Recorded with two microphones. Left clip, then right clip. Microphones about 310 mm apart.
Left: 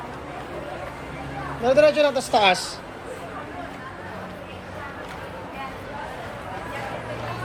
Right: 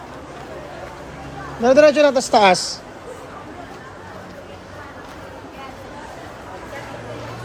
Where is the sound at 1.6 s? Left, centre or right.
Right.